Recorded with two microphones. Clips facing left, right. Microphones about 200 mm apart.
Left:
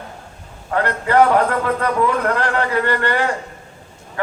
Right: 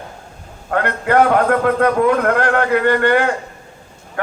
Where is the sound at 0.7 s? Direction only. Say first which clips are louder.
Right 1 dB; 55° right (ahead or behind).